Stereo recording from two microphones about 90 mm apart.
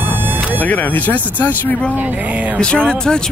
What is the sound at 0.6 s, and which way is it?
Speech, 20° left (ahead or behind).